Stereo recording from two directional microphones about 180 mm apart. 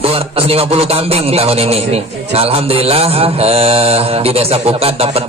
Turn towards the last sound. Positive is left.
turn(degrees=-35)  # may be behind; listen again after turning